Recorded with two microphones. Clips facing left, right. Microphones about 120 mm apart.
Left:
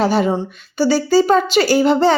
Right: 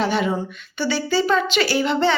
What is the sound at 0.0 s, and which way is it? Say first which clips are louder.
Speech: left 5 dB; 40° left (ahead or behind).